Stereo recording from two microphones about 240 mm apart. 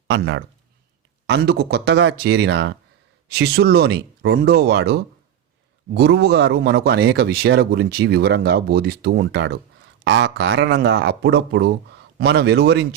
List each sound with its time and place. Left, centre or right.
0.1 s a man's voice: right